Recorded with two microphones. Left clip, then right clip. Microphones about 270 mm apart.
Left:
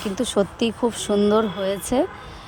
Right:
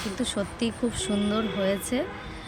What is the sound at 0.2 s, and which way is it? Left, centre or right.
Speech, left.